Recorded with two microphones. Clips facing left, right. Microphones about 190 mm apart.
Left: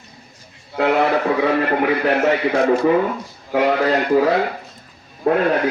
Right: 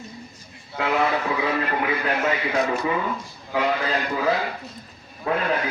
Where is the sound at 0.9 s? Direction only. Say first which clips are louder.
Left 6 dB; 60° left (ahead or behind).